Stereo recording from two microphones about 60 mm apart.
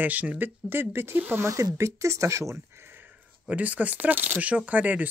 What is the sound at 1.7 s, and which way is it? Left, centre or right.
Speech, right.